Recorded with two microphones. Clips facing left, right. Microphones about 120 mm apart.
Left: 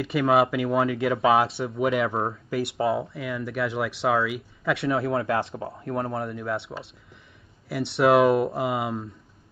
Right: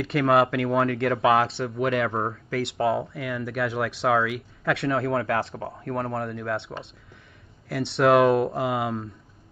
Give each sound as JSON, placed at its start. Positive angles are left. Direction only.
{"t": 0.0, "sound": "speech", "side_deg": 5}
{"t": 5.1, "sound": "speech", "side_deg": 15}